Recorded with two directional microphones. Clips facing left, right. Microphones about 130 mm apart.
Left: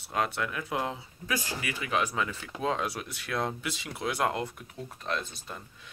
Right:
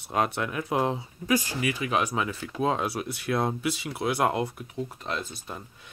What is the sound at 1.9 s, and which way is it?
Speech, 15° right (ahead or behind).